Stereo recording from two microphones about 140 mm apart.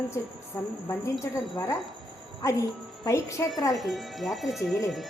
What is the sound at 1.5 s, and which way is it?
Speech, 25° left (ahead or behind).